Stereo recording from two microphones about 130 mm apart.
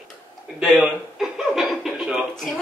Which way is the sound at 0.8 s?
5° right (ahead or behind).